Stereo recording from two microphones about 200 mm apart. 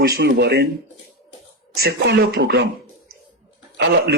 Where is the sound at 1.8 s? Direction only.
55° right (ahead or behind).